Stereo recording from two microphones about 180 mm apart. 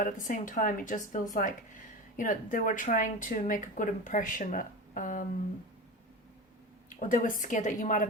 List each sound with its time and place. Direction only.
0.3 s speech: 50° left (ahead or behind)
7.0 s speech: 50° left (ahead or behind)